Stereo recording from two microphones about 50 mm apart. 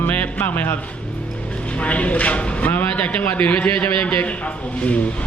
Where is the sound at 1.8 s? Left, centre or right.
Left.